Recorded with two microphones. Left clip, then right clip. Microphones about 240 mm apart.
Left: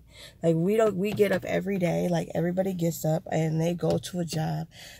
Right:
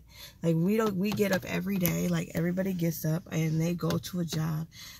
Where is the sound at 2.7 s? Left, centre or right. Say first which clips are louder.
Left 6 dB; left.